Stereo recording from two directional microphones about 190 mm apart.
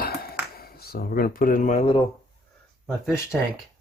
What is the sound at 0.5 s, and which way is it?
Speech, 55° left (ahead or behind).